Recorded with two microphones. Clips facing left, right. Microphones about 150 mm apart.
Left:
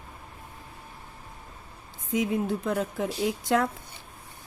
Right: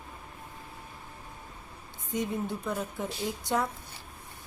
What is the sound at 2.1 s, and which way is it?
A woman's voice, 90° left.